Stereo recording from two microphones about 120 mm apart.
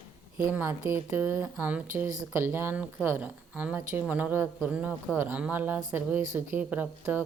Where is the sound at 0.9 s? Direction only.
15° right (ahead or behind).